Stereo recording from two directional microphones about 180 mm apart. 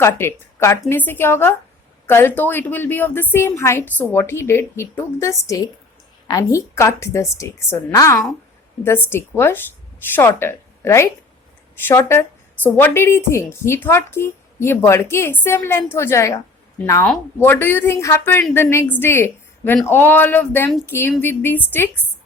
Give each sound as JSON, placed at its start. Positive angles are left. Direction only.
{"t": 0.0, "sound": "a woman's voice", "side_deg": 15}